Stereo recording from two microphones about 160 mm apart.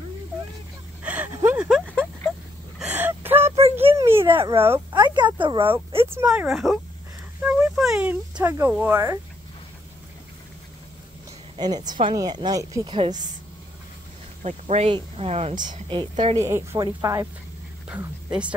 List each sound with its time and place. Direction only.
1.0 s a sound: 10° right (ahead or behind)
2.8 s gasp: 10° right (ahead or behind)
4.3 s speech: 30° right (ahead or behind)
6.0 s speech: 10° right (ahead or behind)
11.5 s speech: 25° right (ahead or behind)
14.4 s speech: 40° right (ahead or behind)
16.4 s speech: 15° right (ahead or behind)
17.8 s a woman's voice: 5° right (ahead or behind)